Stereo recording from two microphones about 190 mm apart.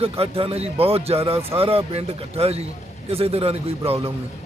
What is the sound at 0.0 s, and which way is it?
Speech, 30° right (ahead or behind).